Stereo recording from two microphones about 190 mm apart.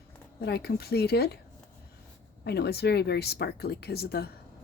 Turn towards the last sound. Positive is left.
turn(degrees=55)  # may be behind; listen again after turning